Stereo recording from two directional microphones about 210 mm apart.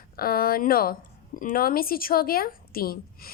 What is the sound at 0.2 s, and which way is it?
A woman's voice, 45° left (ahead or behind).